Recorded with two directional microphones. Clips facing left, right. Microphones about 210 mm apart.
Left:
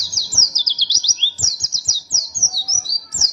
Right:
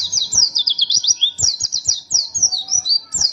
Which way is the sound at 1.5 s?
15° right (ahead or behind).